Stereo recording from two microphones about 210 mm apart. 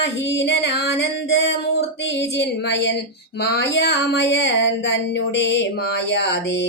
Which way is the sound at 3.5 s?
55° left (ahead or behind).